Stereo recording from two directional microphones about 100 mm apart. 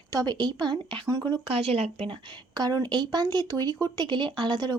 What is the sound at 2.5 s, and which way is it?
A woman's voice, 40° right (ahead or behind).